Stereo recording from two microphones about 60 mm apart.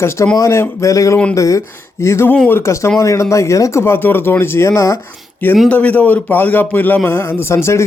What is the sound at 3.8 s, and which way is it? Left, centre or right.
A man's voice, left.